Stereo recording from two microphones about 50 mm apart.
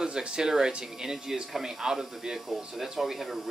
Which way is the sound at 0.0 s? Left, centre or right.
Centre.